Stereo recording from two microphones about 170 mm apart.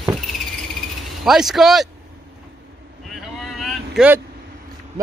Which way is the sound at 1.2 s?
Centre (ahead or behind).